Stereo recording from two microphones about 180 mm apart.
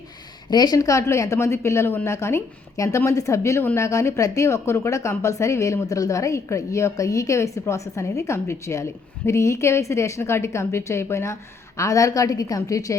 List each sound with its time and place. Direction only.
0.5 s a woman's voice: 20° left (ahead or behind)